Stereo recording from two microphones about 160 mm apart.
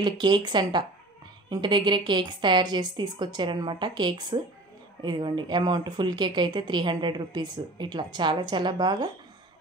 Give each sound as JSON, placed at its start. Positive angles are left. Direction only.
{"t": 0.0, "sound": "speech", "side_deg": -30}